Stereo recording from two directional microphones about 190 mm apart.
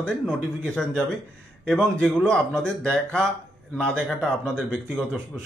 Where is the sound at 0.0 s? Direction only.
5° left (ahead or behind).